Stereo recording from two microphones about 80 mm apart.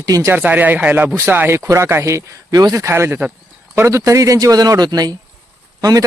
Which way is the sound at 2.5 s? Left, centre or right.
Right.